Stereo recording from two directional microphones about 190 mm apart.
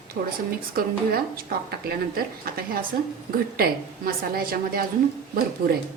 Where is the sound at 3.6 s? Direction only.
50° right (ahead or behind).